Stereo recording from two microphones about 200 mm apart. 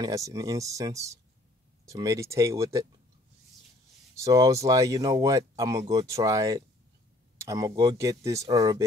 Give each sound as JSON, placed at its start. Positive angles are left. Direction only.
{"t": 0.0, "sound": "speech", "side_deg": -15}
{"t": 4.1, "sound": "speech", "side_deg": -15}